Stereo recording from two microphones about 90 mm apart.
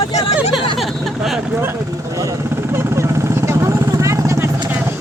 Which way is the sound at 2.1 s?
40° right (ahead or behind).